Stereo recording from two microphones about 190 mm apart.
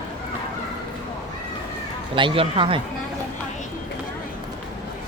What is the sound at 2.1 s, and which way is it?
Speech, 25° right (ahead or behind).